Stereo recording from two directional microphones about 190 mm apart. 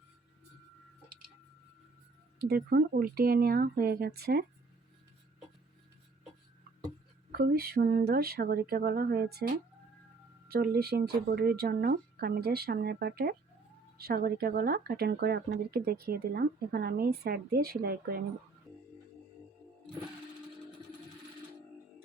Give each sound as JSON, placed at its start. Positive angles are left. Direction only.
{"t": 2.4, "sound": "speech", "side_deg": -55}
{"t": 7.3, "sound": "speech", "side_deg": -55}
{"t": 10.5, "sound": "speech", "side_deg": -55}